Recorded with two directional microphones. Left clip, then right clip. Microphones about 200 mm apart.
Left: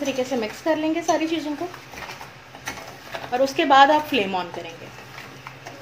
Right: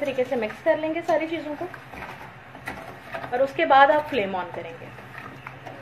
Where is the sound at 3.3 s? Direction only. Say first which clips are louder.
Left 2 dB; 45° left (ahead or behind).